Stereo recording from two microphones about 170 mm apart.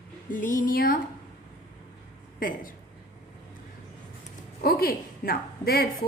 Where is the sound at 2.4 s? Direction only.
55° left (ahead or behind).